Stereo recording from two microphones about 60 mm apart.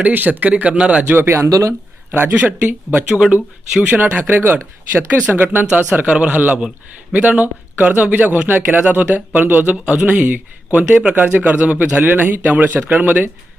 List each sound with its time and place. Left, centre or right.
0.0 s speech: right
1.0 s speech: right
1.5 s speech: right
2.1 s speech: right
3.8 s speech: right
5.2 s speech: right